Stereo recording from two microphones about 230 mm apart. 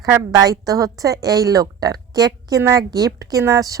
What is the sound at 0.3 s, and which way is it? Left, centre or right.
A woman's voice, centre.